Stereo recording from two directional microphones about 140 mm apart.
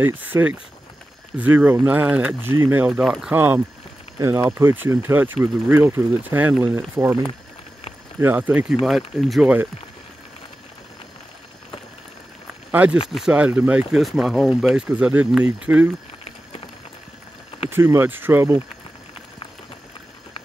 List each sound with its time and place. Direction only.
0.0 s speech: 15° right (ahead or behind)
8.2 s speech: 15° right (ahead or behind)
8.8 s speech: centre (ahead or behind)
12.7 s speech: 10° right (ahead or behind)
17.6 s speech: 15° right (ahead or behind)